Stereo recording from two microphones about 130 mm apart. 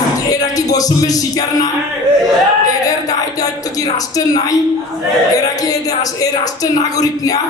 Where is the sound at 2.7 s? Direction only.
30° left (ahead or behind).